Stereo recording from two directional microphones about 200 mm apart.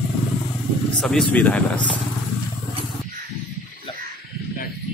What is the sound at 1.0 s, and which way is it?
Speech, centre (ahead or behind).